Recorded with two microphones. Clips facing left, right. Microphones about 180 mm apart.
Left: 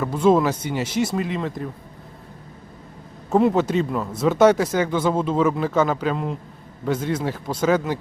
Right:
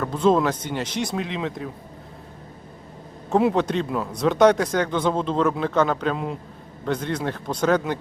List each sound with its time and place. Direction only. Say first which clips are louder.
0.0 s speech: left 2 dB; 10° left (ahead or behind)
3.2 s speech: left 2 dB; centre (ahead or behind)